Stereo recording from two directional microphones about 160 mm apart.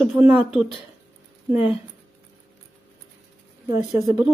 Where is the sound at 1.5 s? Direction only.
10° right (ahead or behind).